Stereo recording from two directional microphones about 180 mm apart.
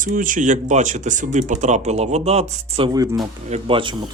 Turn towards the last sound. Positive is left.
turn(degrees=-30)  # may be behind; listen again after turning